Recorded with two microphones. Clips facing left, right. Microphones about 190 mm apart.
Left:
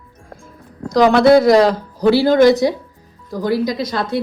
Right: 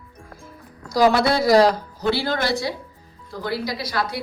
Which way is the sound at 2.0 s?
35° left (ahead or behind).